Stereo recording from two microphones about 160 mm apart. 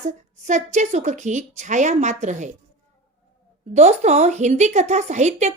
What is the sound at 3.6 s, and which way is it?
A woman's voice, 45° right (ahead or behind).